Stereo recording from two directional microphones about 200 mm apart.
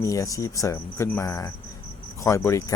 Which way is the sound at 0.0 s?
15° left (ahead or behind).